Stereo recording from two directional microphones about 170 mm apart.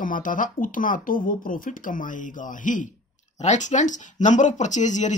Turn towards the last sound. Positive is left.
turn(degrees=45)  # may be behind; listen again after turning